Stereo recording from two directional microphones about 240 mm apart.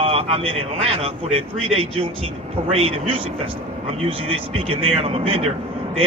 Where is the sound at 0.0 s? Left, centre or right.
Right.